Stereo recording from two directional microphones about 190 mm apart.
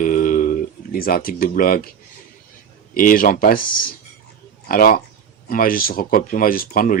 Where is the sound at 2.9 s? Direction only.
50° left (ahead or behind).